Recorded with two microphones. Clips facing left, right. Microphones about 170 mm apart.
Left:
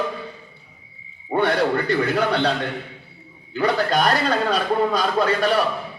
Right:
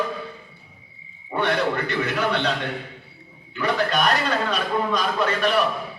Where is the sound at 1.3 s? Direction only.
35° left (ahead or behind).